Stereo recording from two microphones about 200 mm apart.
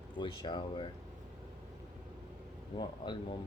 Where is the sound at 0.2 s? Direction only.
25° left (ahead or behind).